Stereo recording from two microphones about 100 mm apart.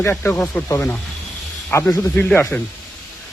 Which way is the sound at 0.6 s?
30° left (ahead or behind).